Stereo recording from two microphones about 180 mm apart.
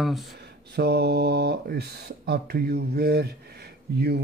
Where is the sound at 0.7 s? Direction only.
65° right (ahead or behind).